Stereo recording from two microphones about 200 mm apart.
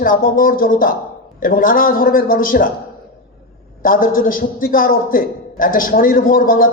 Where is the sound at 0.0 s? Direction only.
45° left (ahead or behind).